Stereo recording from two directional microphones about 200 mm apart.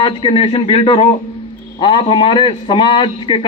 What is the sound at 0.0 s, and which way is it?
A man's voice, 25° left (ahead or behind).